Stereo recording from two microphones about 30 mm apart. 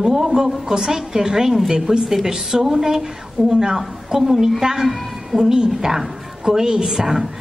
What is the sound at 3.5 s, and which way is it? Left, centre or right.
Speech, right.